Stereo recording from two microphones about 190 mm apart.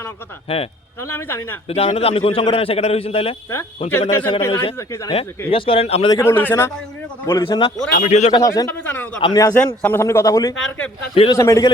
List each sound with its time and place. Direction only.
0.4 s a man's voice: 30° left (ahead or behind)
1.0 s a man's voice: 10° left (ahead or behind)
1.6 s a man's voice: 30° left (ahead or behind); by 5.1 s 15° left (ahead or behind)
5.5 s speech: 30° left (ahead or behind)
6.1 s a man's voice: 15° left (ahead or behind)
7.3 s speech: 20° left (ahead or behind)
7.9 s a man's voice: 40° left (ahead or behind)
8.3 s a man's voice: 20° left (ahead or behind)
9.2 s a man's voice: 20° left (ahead or behind)
10.6 s speech: 5° left (ahead or behind)
11.1 s a man's voice: 30° left (ahead or behind)
11.3 s a man's voice: 15° left (ahead or behind)